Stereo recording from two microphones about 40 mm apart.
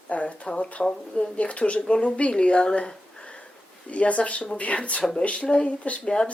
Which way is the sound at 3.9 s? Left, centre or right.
Left.